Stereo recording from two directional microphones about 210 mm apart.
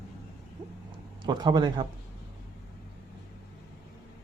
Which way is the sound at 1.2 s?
20° right (ahead or behind).